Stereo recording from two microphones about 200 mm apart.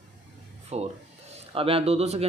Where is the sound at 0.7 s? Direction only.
30° right (ahead or behind).